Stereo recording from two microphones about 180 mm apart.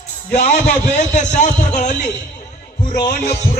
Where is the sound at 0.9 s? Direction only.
40° left (ahead or behind).